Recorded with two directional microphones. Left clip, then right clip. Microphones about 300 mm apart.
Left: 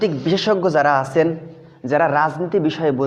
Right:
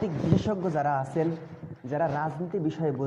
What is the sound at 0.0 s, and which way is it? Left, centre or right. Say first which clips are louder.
A man's voice: left 10 dB; left.